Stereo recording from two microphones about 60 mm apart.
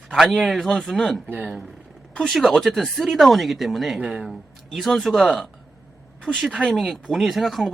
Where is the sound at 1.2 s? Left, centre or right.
Right.